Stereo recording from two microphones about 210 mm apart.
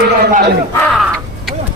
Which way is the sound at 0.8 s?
Centre (ahead or behind).